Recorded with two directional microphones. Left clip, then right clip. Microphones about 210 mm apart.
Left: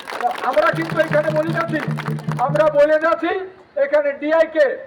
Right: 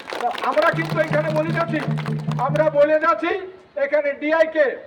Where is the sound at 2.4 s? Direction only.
15° right (ahead or behind).